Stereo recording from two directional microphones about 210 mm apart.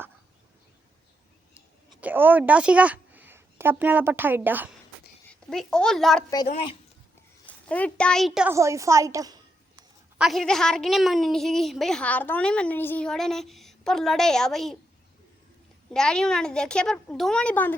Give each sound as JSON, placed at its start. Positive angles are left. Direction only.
{"t": 2.0, "sound": "a woman's voice", "side_deg": -10}
{"t": 5.3, "sound": "a child's voice", "side_deg": 5}
{"t": 7.4, "sound": "a woman's voice", "side_deg": 5}
{"t": 8.5, "sound": "a woman's voice", "side_deg": -15}
{"t": 10.2, "sound": "a woman's voice", "side_deg": 0}
{"t": 15.9, "sound": "a woman's voice", "side_deg": 5}